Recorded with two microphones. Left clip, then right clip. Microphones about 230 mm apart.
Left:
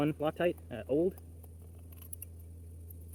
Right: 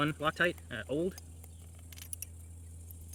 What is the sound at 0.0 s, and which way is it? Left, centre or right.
Speech, right.